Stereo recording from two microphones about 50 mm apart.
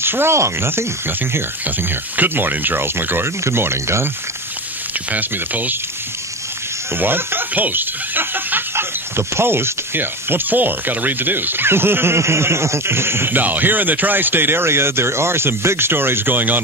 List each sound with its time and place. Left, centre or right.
0.0 s speech: right
2.1 s speech: right
3.4 s speech: right
5.1 s speech: right
6.9 s speech: right
12.2 s speech: right
13.3 s speech: right